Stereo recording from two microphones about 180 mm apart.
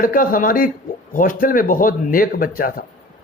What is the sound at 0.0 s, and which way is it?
A man's voice, 50° left (ahead or behind).